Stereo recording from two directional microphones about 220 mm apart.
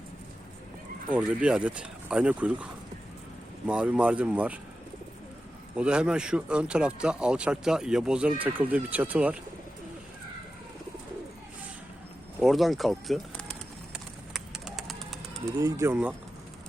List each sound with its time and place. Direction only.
1.1 s speech: 5° right (ahead or behind)
3.7 s speech: 5° right (ahead or behind)
5.7 s speech: 5° right (ahead or behind)
12.4 s speech: centre (ahead or behind)
13.9 s bird: centre (ahead or behind)
15.6 s speech: 10° right (ahead or behind)